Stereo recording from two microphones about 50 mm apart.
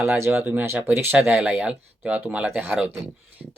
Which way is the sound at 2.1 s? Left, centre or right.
Right.